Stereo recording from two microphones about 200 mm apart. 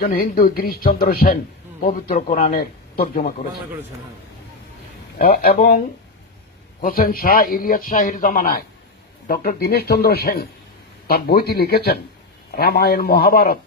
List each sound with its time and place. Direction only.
0.2 s a man's voice: 45° left (ahead or behind)
5.1 s a man's voice: 50° left (ahead or behind)
6.8 s a man's voice: 45° left (ahead or behind)